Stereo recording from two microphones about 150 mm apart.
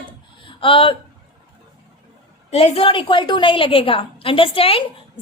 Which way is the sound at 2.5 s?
45° left (ahead or behind).